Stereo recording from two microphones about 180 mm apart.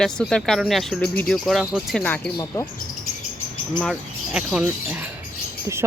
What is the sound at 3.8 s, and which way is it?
Speech, centre (ahead or behind).